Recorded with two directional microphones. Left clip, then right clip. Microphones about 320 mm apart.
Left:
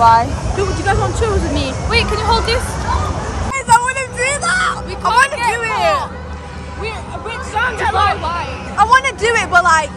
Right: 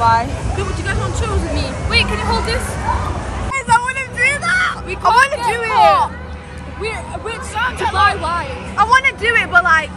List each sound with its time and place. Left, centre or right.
0.0 s speech: centre
0.6 s speech: left
3.5 s vehicle: centre
5.0 s speech: centre
7.5 s speech: left
8.1 s speech: right
8.7 s speech: centre